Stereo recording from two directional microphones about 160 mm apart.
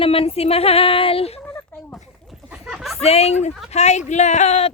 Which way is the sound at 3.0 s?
40° left (ahead or behind).